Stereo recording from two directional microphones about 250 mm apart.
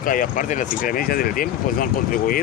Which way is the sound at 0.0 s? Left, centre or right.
Left.